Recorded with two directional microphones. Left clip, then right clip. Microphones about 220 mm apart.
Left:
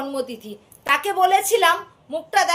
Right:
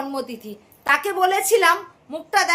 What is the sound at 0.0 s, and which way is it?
A woman's voice, 10° right (ahead or behind).